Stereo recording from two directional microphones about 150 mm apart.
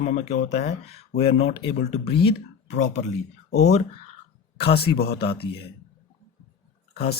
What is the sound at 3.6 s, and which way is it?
A man's voice, 50° left (ahead or behind).